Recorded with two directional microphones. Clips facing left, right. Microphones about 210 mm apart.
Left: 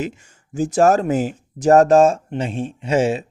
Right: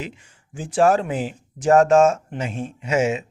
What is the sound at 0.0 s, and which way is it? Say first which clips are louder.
Speech: left 7 dB; 45° left (ahead or behind).